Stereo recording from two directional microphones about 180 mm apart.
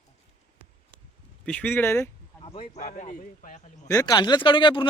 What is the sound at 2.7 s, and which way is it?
Speech, 45° left (ahead or behind).